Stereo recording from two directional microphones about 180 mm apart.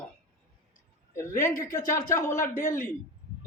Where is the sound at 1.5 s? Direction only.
50° left (ahead or behind).